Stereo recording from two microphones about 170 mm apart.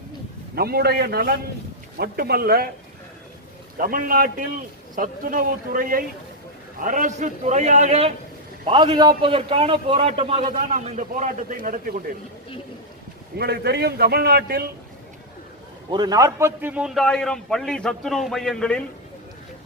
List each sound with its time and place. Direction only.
0.5 s a man's voice: 65° right (ahead or behind)
3.8 s a man's voice: 55° right (ahead or behind); by 8.1 s 40° right (ahead or behind)
8.6 s a man's voice: 30° right (ahead or behind); by 11.9 s 55° right (ahead or behind)
13.4 s a man's voice: 70° right (ahead or behind)
15.9 s a man's voice: 25° right (ahead or behind); by 18.8 s 5° left (ahead or behind)